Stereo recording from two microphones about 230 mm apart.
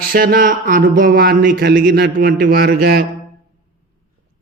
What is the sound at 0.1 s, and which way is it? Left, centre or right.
A man's voice, right.